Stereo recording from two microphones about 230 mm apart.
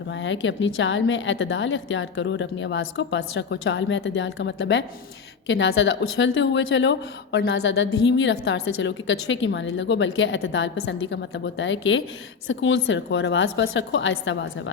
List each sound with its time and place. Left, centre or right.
0.1 s a woman's voice: left